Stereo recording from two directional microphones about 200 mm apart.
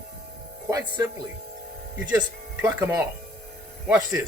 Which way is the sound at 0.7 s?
15° right (ahead or behind).